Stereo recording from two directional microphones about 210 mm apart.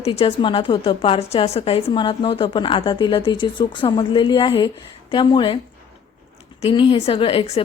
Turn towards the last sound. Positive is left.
turn(degrees=25)  # may be behind; listen again after turning